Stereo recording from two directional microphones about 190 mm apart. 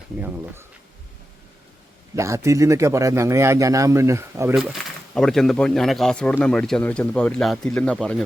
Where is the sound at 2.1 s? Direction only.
15° right (ahead or behind).